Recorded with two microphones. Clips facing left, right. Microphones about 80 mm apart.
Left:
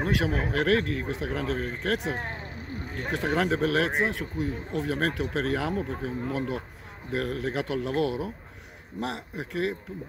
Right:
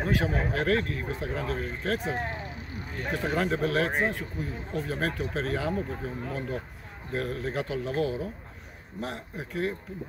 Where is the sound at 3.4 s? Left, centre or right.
Left.